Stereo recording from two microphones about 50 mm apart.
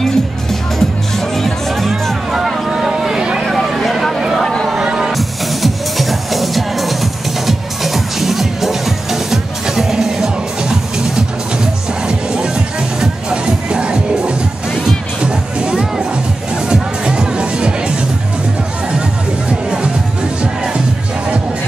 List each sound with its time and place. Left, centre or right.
0.0 s music: centre
2.3 s vehicle: centre
3.4 s vehicle: centre
4.4 s a sound: centre
4.6 s music: centre